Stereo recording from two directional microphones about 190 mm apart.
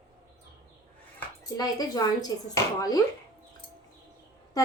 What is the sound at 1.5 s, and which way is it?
A woman's voice, 20° left (ahead or behind).